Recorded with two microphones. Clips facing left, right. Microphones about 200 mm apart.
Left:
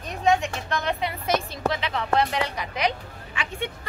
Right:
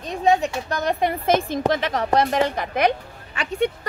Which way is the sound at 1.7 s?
45° right (ahead or behind).